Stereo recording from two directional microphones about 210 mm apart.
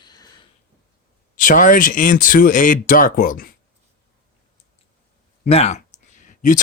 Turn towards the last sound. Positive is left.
turn(degrees=40)  # may be behind; listen again after turning